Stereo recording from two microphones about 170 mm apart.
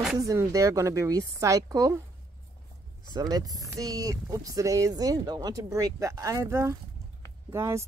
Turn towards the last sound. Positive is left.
turn(degrees=-15)  # may be behind; listen again after turning